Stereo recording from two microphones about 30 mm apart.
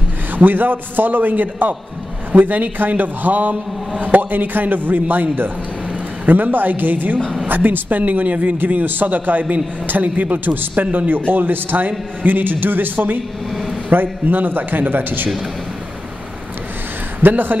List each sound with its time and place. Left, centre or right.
0.3 s a man's voice: right
2.3 s a man's voice: right
8.6 s a man's voice: right
13.5 s a sound: centre
14.3 s a man's voice: right
17.2 s a man's voice: right